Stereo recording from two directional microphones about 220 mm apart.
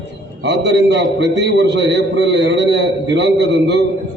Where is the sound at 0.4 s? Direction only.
50° right (ahead or behind).